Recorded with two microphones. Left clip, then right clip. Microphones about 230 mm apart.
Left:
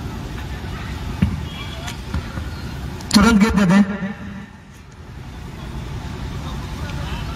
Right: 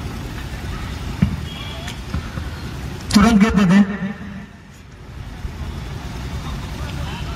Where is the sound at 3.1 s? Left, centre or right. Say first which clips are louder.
Even; left.